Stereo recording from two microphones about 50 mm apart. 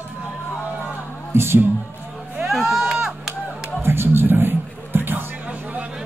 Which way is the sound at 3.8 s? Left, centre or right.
Right.